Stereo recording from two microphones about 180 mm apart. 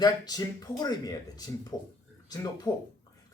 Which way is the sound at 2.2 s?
20° left (ahead or behind).